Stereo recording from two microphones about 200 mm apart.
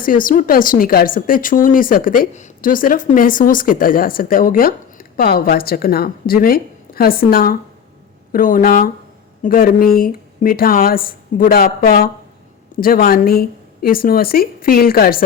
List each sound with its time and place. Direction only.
0.0 s speech: 45° left (ahead or behind)